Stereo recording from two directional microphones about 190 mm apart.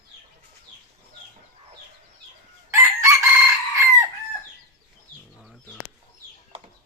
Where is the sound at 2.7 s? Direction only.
15° right (ahead or behind).